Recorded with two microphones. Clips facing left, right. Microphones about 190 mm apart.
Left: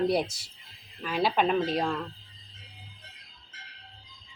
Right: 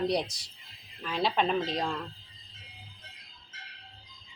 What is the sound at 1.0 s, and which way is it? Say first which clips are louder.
Speech: left 3 dB; 5° left (ahead or behind).